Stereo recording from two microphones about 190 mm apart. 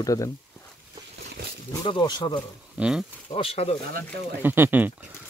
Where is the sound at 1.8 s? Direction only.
25° left (ahead or behind).